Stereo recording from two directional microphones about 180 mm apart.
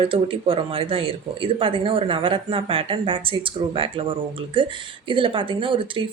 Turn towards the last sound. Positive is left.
turn(degrees=-30)  # may be behind; listen again after turning